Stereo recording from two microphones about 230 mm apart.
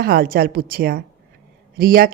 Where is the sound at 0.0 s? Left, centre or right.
Right.